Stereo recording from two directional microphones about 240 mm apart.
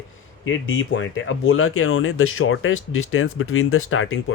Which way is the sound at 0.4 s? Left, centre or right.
Left.